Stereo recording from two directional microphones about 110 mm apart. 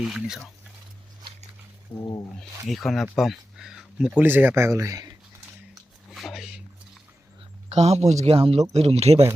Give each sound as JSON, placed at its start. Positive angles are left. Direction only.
{"t": 0.0, "sound": "speech", "side_deg": -5}
{"t": 1.9, "sound": "speech", "side_deg": 40}
{"t": 2.4, "sound": "speech", "side_deg": 0}
{"t": 4.2, "sound": "speech", "side_deg": -20}
{"t": 6.1, "sound": "a sound", "side_deg": 0}
{"t": 7.7, "sound": "speech", "side_deg": -75}